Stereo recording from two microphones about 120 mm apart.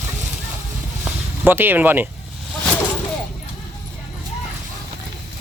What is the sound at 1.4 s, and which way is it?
Speech, 15° right (ahead or behind).